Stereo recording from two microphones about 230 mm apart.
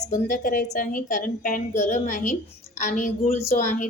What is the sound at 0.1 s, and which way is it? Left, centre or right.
A woman's voice, left.